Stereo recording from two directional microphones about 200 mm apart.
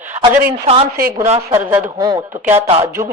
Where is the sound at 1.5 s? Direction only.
15° right (ahead or behind).